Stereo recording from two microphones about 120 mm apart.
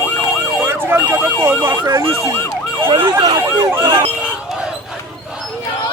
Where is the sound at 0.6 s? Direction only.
20° right (ahead or behind).